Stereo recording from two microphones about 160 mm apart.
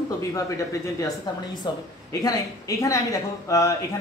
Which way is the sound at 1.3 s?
25° left (ahead or behind).